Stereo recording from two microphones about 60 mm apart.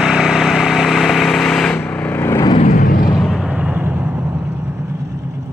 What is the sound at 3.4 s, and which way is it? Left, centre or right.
Vehicle, right.